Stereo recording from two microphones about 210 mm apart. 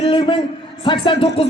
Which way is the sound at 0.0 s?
25° left (ahead or behind).